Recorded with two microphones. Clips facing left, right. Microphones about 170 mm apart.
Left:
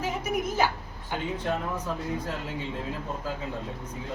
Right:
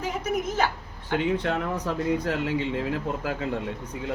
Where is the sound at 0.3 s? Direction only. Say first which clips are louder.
Right 1 dB; 10° left (ahead or behind).